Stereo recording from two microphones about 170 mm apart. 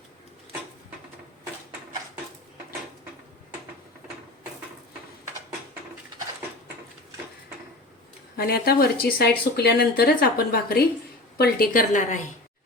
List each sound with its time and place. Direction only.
8.4 s speech: 65° left (ahead or behind)